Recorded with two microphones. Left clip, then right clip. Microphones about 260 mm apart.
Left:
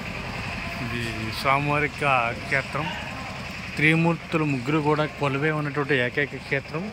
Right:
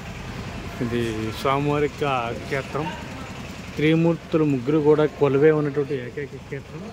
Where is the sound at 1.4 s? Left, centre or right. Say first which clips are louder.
Even; centre.